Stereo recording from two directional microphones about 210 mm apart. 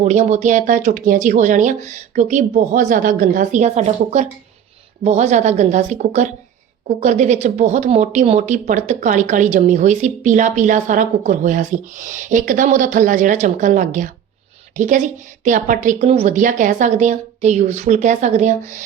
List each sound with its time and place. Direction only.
0.0 s speech: 35° right (ahead or behind)